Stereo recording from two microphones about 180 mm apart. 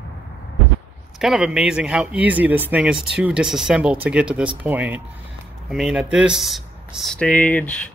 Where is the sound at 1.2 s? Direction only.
5° right (ahead or behind).